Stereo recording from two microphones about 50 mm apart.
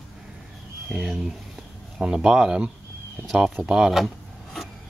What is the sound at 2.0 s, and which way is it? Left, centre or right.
Speech, centre.